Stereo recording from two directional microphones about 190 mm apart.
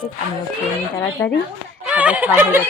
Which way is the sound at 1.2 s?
10° left (ahead or behind).